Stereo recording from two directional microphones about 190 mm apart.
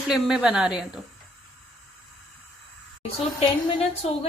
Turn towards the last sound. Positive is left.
turn(degrees=30)  # may be behind; listen again after turning